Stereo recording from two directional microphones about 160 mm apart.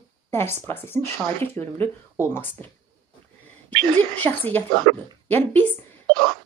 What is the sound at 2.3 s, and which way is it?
Speech, 10° left (ahead or behind).